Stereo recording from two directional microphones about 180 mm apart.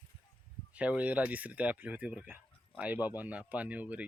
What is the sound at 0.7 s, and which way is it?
Speech, 10° right (ahead or behind).